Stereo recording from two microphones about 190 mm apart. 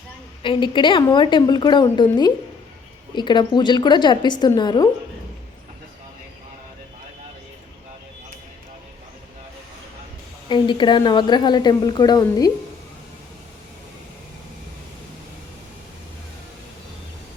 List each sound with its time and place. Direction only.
0.4 s a woman's voice: 25° left (ahead or behind)
10.5 s a woman's voice: 25° left (ahead or behind)